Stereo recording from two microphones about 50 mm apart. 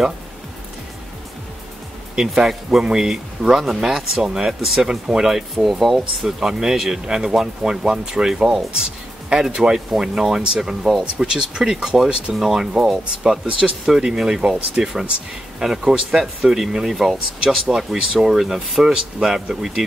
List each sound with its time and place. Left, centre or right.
2.1 s speech: centre
6.2 s speech: centre